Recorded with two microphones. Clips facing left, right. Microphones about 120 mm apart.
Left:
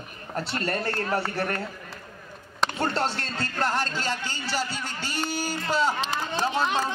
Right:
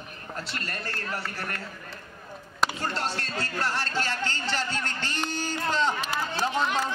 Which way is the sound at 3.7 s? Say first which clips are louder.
Left 1 dB; 20° left (ahead or behind).